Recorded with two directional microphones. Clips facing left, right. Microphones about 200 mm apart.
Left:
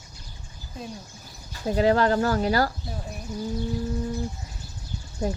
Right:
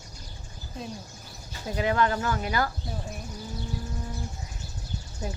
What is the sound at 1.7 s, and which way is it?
Speech, 35° left (ahead or behind).